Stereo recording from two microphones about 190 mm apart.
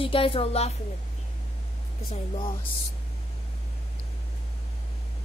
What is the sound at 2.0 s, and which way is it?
Speech, 30° left (ahead or behind).